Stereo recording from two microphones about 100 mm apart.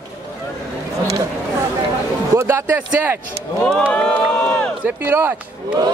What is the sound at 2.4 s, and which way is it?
Speech, 25° right (ahead or behind).